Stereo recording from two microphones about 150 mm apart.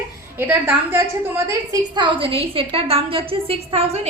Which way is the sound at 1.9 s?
30° right (ahead or behind).